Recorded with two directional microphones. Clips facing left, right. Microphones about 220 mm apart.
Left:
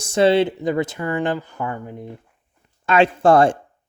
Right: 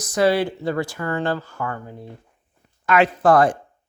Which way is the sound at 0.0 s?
25° left (ahead or behind).